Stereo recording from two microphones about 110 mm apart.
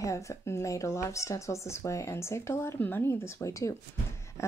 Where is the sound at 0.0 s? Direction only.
30° left (ahead or behind).